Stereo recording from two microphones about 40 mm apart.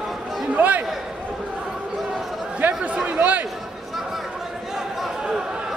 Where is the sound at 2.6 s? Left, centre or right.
Right.